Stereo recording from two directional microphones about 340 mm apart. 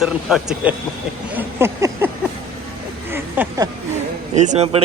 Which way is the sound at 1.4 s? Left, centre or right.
Centre.